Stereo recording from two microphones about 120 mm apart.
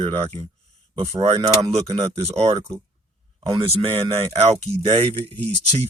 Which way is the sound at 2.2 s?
55° right (ahead or behind).